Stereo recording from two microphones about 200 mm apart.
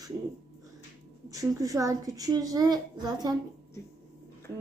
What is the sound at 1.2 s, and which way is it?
Speech, 15° right (ahead or behind).